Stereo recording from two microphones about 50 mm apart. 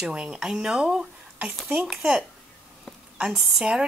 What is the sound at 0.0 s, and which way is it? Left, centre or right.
Speech, centre.